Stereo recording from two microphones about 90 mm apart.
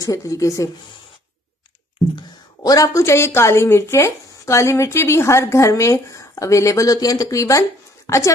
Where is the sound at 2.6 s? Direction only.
40° left (ahead or behind).